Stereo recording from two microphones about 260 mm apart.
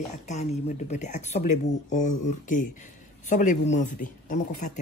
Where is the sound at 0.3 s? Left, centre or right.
Left.